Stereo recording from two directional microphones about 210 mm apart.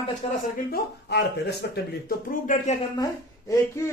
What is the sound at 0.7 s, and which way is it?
Speech, 50° left (ahead or behind).